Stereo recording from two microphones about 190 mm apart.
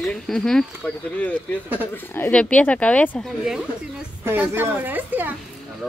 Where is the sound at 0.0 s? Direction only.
Centre (ahead or behind).